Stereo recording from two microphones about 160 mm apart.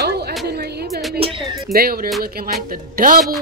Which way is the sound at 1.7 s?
70° right (ahead or behind).